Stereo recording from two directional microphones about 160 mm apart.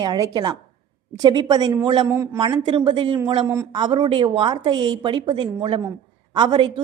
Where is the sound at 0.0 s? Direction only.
25° right (ahead or behind).